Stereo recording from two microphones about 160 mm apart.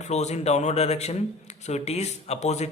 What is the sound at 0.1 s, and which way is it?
A man's voice, 45° left (ahead or behind).